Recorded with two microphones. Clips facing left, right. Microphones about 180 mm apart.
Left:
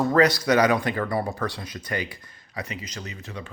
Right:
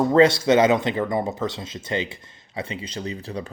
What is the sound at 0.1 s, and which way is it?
Speech, 25° right (ahead or behind).